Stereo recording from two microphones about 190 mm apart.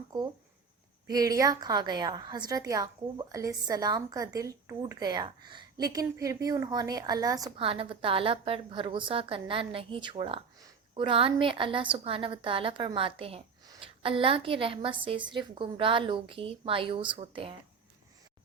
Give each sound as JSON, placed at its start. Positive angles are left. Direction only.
{"t": 0.1, "sound": "a woman's voice", "side_deg": -20}